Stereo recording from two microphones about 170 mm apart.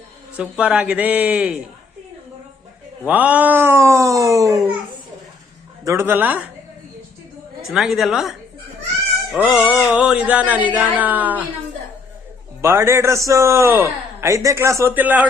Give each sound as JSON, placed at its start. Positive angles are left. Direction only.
{"t": 0.3, "sound": "a man's voice", "side_deg": -5}
{"t": 3.1, "sound": "a man's voice", "side_deg": -10}
{"t": 5.8, "sound": "a man's voice", "side_deg": -15}
{"t": 7.6, "sound": "a woman's voice", "side_deg": 0}
{"t": 12.6, "sound": "a man's voice", "side_deg": -15}